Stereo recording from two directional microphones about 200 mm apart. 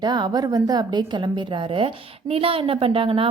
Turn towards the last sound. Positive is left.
turn(degrees=-25)  # may be behind; listen again after turning